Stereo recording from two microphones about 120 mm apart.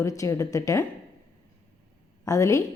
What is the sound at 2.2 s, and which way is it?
Speech, 25° left (ahead or behind).